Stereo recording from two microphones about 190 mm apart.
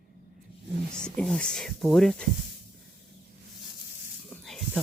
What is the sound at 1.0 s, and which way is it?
Speech, 5° left (ahead or behind).